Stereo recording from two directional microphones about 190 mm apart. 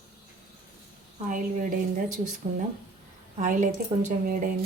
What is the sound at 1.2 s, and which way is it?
Speech, 45° right (ahead or behind).